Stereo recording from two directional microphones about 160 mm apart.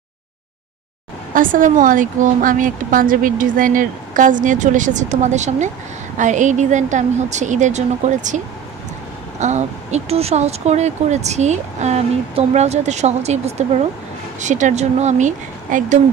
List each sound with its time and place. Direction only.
1.3 s a woman's voice: 55° right (ahead or behind)
9.4 s speech: 45° right (ahead or behind)